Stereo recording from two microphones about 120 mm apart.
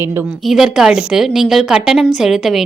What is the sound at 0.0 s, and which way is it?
Speech, 20° right (ahead or behind).